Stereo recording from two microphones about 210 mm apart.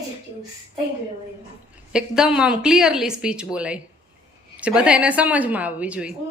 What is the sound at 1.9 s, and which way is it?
Speech, 5° right (ahead or behind).